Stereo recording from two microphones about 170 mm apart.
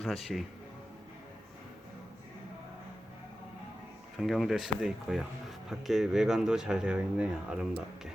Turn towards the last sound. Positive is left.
turn(degrees=-5)  # may be behind; listen again after turning